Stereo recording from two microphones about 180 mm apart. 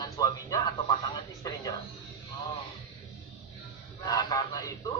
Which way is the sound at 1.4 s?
20° left (ahead or behind).